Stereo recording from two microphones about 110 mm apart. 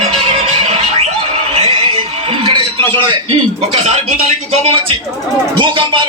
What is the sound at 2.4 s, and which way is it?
Music, 50° right (ahead or behind).